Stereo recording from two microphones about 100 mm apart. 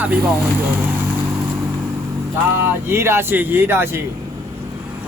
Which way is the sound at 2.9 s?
25° right (ahead or behind).